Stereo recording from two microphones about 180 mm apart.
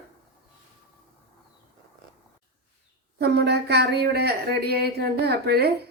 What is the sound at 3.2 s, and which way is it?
Speech, 65° right (ahead or behind).